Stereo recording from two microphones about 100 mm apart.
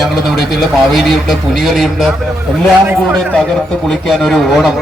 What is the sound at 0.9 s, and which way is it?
A man's voice, centre (ahead or behind).